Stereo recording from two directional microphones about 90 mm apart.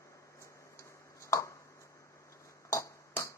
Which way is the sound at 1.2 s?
35° left (ahead or behind).